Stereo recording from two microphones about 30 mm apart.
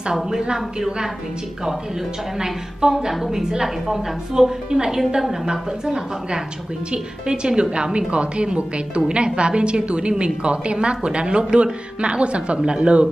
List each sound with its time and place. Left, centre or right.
0.0 s a woman's voice: right
2.3 s a woman's voice: centre
5.2 s a woman's voice: centre
5.5 s a woman's voice: right